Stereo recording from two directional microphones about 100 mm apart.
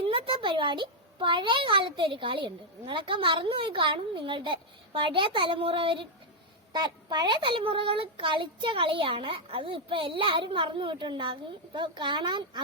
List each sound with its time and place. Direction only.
0.0 s speech: 60° right (ahead or behind)